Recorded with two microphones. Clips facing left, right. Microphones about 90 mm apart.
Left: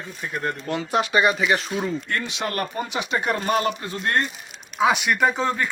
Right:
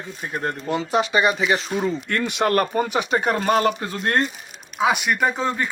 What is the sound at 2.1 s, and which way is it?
Speech, 55° right (ahead or behind).